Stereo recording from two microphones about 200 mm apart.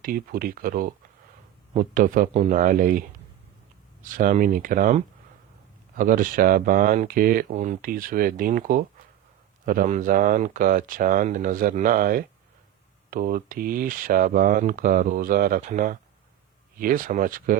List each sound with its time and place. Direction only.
0.0 s speech: 45° right (ahead or behind)
4.1 s speech: 40° right (ahead or behind)